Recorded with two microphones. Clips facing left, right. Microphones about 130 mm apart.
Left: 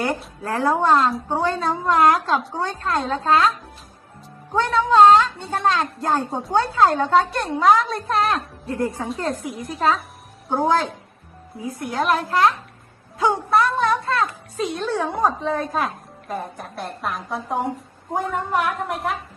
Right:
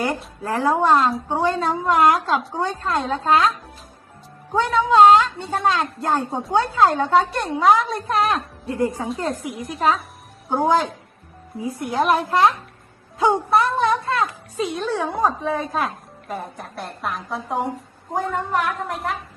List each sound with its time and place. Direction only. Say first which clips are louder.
0.0 s a woman's voice: even; 5° right (ahead or behind)
4.5 s a woman's voice: even; 10° right (ahead or behind)
9.0 s a woman's voice: even; centre (ahead or behind)
10.5 s a woman's voice: right 1 dB; 10° right (ahead or behind)
11.6 s a woman's voice: right 2 dB; 20° right (ahead or behind); by 19.1 s centre (ahead or behind)